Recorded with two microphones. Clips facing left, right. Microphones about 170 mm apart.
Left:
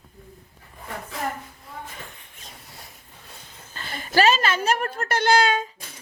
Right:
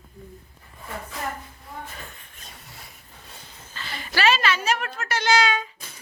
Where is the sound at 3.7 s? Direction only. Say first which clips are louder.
Left 7 dB; 45° left (ahead or behind).